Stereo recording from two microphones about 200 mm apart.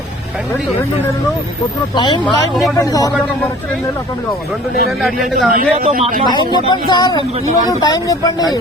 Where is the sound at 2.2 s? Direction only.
Centre (ahead or behind).